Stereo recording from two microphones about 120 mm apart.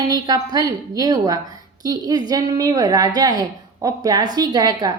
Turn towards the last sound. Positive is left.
turn(degrees=-35)  # may be behind; listen again after turning